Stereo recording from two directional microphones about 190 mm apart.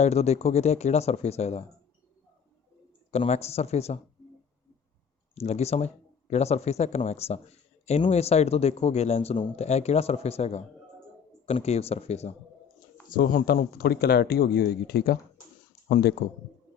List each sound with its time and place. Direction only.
0.0 s speech: 35° left (ahead or behind)
3.1 s speech: 35° left (ahead or behind)
5.3 s speech: 35° left (ahead or behind)
13.1 s speech: 50° left (ahead or behind)